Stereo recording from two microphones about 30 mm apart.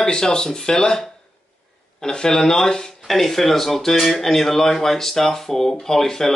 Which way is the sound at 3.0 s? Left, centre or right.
Centre.